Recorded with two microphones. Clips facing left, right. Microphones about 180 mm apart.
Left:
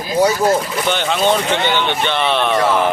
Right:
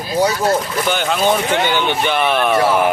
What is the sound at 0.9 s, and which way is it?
Speech, 5° right (ahead or behind).